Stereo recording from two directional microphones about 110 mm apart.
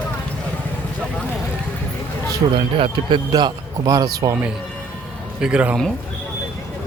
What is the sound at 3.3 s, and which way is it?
A man's voice, 35° right (ahead or behind).